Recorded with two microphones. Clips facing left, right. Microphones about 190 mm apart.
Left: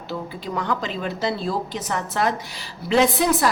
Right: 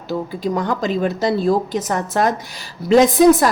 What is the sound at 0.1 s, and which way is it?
A woman's voice, 40° right (ahead or behind).